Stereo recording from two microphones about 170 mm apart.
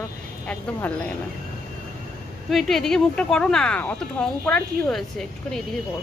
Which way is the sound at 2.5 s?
Centre (ahead or behind).